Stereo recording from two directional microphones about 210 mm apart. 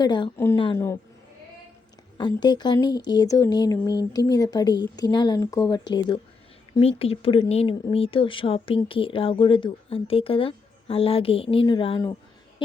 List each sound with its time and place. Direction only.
0.0 s speech: 20° left (ahead or behind)
2.4 s speech: 20° left (ahead or behind)